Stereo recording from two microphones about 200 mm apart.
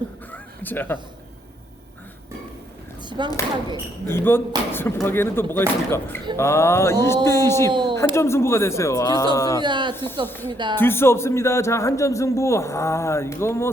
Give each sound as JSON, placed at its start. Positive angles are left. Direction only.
{"t": 0.3, "sound": "a sound", "side_deg": 10}
{"t": 3.0, "sound": "a sound", "side_deg": -20}
{"t": 4.0, "sound": "a man's voice", "side_deg": 10}
{"t": 7.7, "sound": "speech", "side_deg": -25}
{"t": 8.1, "sound": "a man's voice", "side_deg": 15}
{"t": 9.6, "sound": "speech", "side_deg": -20}
{"t": 9.9, "sound": "a man's voice", "side_deg": 10}